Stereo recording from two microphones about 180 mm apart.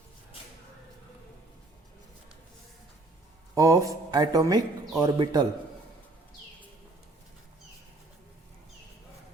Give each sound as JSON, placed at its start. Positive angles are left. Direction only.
{"t": 3.5, "sound": "a man's voice", "side_deg": -20}